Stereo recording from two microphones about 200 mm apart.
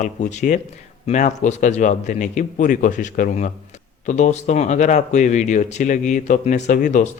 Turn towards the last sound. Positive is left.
turn(degrees=40)  # may be behind; listen again after turning